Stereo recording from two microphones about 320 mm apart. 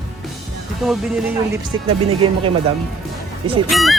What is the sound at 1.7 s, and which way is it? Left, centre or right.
Speech, centre.